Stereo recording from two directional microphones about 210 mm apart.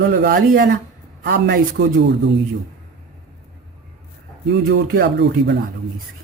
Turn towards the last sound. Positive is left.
turn(degrees=-50)  # may be behind; listen again after turning